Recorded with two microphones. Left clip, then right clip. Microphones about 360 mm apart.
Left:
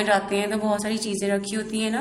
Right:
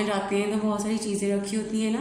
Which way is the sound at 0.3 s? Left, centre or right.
Left.